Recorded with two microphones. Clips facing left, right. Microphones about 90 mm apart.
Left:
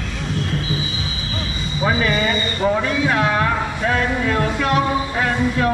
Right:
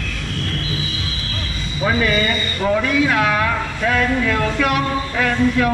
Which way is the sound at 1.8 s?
5° left (ahead or behind).